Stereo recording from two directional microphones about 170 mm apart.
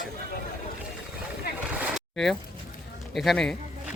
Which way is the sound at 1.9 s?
Centre (ahead or behind).